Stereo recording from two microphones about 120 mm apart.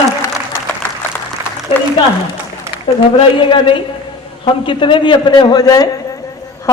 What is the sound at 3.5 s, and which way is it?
A woman's voice, 45° left (ahead or behind).